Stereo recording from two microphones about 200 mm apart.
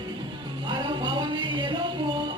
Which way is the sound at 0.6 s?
25° right (ahead or behind).